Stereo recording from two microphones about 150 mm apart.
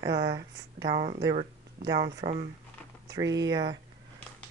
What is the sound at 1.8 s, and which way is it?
Speech, 90° right.